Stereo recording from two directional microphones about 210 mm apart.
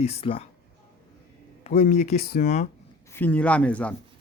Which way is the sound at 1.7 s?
35° left (ahead or behind).